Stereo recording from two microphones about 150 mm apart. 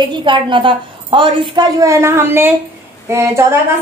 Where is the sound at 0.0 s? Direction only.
30° right (ahead or behind).